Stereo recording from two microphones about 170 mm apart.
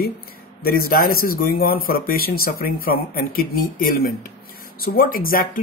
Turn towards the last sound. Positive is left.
turn(degrees=55)  # may be behind; listen again after turning